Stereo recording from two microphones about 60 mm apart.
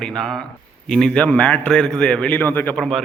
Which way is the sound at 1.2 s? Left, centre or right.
Centre.